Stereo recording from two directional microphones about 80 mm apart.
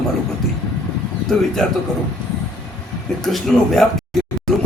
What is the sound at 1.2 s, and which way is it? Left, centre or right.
Speech, centre.